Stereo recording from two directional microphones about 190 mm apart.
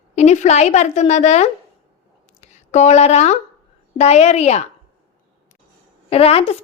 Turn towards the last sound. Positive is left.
turn(degrees=30)  # may be behind; listen again after turning